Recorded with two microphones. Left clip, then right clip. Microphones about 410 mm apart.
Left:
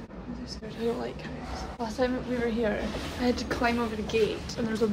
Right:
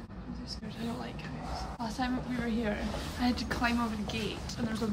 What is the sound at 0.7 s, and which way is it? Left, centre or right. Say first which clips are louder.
A woman's voice: left 10 dB; centre.